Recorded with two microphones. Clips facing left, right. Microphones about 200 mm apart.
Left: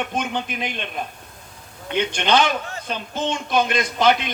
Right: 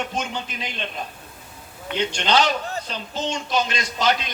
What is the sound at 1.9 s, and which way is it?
A man's voice, 55° left (ahead or behind).